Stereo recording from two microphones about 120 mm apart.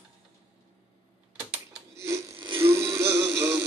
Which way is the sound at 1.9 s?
25° right (ahead or behind).